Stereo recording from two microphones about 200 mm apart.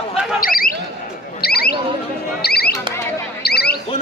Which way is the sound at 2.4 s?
50° left (ahead or behind).